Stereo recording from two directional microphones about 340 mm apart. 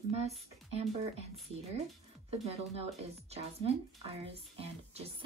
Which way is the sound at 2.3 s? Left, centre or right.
Centre.